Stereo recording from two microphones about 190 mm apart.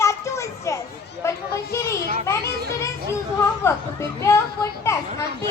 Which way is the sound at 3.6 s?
15° left (ahead or behind).